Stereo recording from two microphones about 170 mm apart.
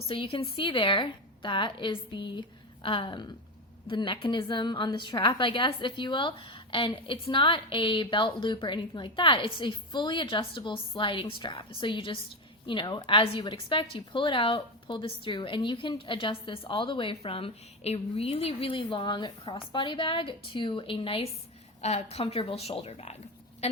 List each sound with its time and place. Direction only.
0.1 s a woman's voice: 35° left (ahead or behind)